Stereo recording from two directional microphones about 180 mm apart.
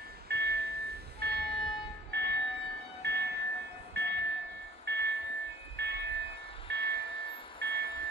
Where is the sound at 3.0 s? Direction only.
70° right (ahead or behind).